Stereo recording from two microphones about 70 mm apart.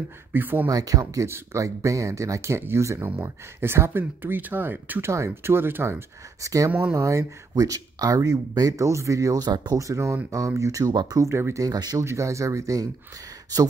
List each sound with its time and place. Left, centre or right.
0.3 s speech: right
0.7 s speech: right
5.1 s speech: right
6.4 s speech: right
9.8 s speech: right
10.9 s speech: right
11.1 s speech: right
11.6 s speech: right
12.0 s speech: right